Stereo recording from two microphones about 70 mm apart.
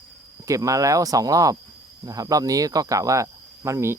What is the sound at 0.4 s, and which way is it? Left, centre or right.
Speech, right.